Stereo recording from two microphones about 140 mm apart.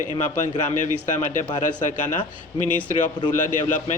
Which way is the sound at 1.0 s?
65° left (ahead or behind).